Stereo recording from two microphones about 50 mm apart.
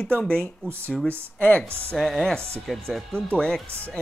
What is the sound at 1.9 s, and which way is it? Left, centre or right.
Speech, centre.